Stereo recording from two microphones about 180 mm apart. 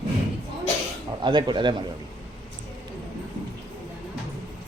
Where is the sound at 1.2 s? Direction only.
25° right (ahead or behind).